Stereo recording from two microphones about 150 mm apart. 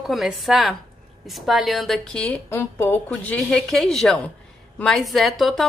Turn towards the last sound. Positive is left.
turn(degrees=0)  # may be behind; listen again after turning